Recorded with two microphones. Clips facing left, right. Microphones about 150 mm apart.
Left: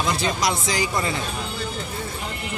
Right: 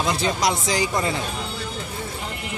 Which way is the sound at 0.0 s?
20° right (ahead or behind).